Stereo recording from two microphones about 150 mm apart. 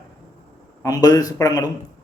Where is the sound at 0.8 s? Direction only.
25° left (ahead or behind).